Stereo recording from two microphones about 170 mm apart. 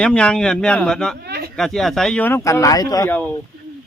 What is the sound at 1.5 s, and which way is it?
Speech, centre (ahead or behind).